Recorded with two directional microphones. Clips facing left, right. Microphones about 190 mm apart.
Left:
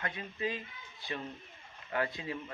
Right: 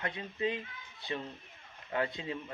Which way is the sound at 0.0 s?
25° right (ahead or behind).